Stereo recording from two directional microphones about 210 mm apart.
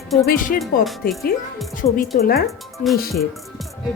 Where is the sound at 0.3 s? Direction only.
40° left (ahead or behind).